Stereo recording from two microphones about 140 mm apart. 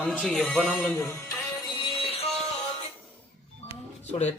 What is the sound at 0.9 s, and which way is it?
Speech, 20° left (ahead or behind).